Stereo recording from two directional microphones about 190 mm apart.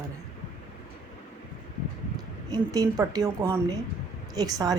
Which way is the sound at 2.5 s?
20° right (ahead or behind).